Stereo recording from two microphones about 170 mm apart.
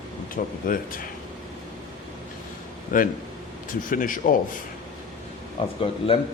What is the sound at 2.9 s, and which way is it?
Speech, 50° left (ahead or behind).